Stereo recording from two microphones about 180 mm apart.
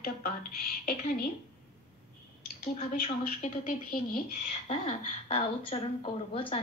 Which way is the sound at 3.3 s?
45° left (ahead or behind).